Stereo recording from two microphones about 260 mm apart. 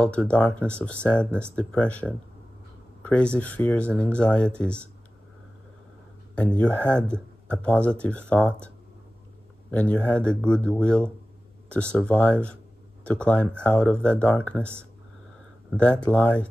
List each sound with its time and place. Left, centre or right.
0.0 s speech: centre
3.0 s a sound: centre
3.3 s speech: centre
6.3 s speech: centre
9.7 s speech: centre
15.7 s speech: centre